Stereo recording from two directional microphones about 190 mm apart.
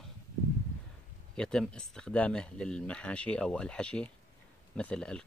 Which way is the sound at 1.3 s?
5° left (ahead or behind).